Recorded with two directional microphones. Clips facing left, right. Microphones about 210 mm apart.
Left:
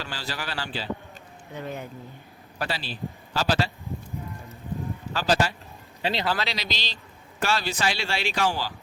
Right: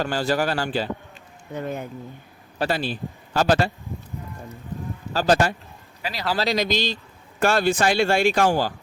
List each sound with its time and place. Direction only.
0.0 s a man's voice: 50° right (ahead or behind)
5.1 s a man's voice: 50° right (ahead or behind)
6.0 s a man's voice: 30° left (ahead or behind)
6.3 s a man's voice: 45° right (ahead or behind)